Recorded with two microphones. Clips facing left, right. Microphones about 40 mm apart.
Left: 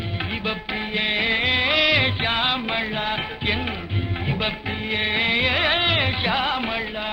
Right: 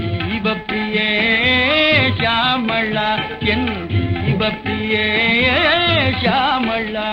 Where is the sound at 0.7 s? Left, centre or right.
Right.